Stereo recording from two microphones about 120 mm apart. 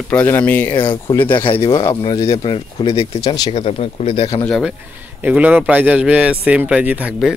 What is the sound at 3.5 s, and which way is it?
Speech, 55° left (ahead or behind).